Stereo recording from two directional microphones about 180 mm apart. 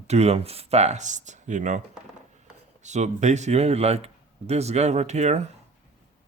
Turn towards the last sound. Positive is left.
turn(degrees=-40)  # may be behind; listen again after turning